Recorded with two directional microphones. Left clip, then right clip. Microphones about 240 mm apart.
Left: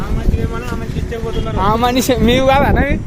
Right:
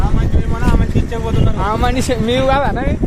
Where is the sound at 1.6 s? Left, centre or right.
Left.